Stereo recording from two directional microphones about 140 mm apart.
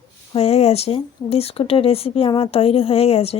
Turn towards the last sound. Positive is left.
turn(degrees=45)  # may be behind; listen again after turning